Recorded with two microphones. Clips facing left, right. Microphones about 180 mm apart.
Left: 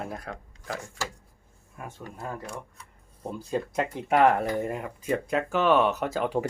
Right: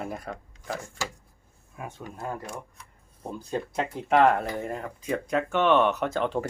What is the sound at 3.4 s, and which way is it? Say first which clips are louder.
Speech: left 1 dB; 5° left (ahead or behind).